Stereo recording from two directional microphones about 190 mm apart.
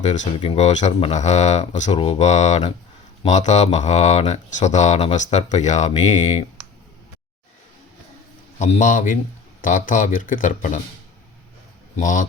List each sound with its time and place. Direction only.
0.0 s speech: 35° left (ahead or behind)
8.5 s speech: 40° left (ahead or behind)
11.9 s speech: 40° left (ahead or behind)